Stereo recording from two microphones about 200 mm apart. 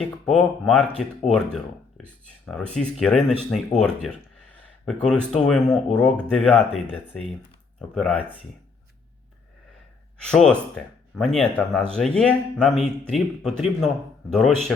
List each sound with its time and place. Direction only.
0.0 s speech: centre (ahead or behind)
10.2 s speech: 5° left (ahead or behind)